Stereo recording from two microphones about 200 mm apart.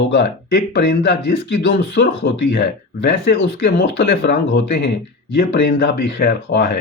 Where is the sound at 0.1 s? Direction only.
55° left (ahead or behind).